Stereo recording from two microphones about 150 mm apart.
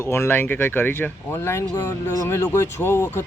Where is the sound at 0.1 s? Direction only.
15° left (ahead or behind).